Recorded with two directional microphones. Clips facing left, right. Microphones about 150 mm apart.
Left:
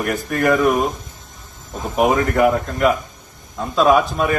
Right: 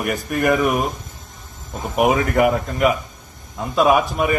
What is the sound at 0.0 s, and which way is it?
Speech, 5° right (ahead or behind).